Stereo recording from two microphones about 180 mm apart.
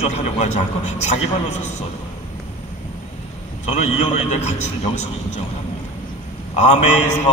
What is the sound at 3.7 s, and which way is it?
A man's voice, 40° left (ahead or behind).